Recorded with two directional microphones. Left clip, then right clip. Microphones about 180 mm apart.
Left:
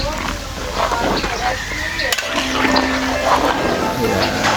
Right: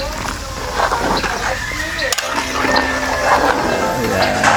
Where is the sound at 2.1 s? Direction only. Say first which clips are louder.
Even; 25° right (ahead or behind).